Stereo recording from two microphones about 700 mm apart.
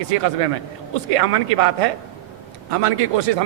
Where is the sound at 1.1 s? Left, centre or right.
Right.